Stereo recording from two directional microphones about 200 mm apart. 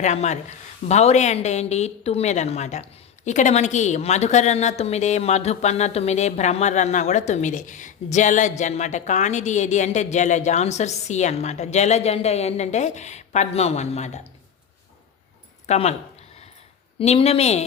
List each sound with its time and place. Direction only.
0.0 s a woman's voice: 35° left (ahead or behind)
15.6 s a woman's voice: 35° left (ahead or behind)
17.0 s a woman's voice: 30° left (ahead or behind)